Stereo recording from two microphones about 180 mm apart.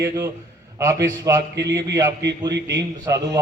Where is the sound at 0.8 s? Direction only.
15° right (ahead or behind).